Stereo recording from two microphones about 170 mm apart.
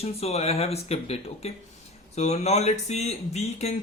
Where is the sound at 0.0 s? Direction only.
40° left (ahead or behind).